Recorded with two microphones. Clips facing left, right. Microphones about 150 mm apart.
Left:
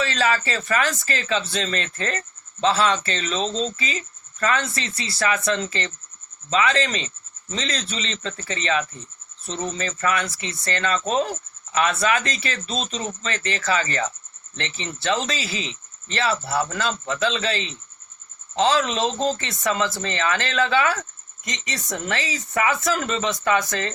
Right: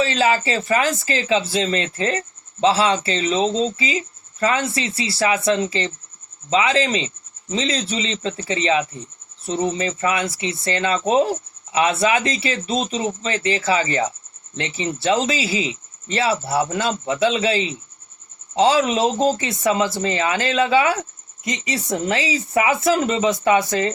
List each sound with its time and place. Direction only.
0.0 s speech: 25° right (ahead or behind)
3.3 s speech: 15° right (ahead or behind)
9.5 s speech: 15° right (ahead or behind)
12.6 s speech: 10° right (ahead or behind)
15.6 s a sound: 10° right (ahead or behind)
16.1 s speech: 25° right (ahead or behind)